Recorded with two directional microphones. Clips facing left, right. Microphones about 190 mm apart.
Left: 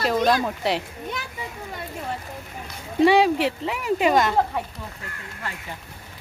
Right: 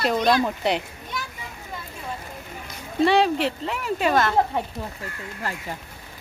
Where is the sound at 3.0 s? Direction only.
10° left (ahead or behind).